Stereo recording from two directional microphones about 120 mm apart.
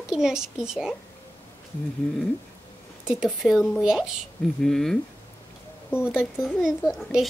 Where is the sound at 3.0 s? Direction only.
5° right (ahead or behind).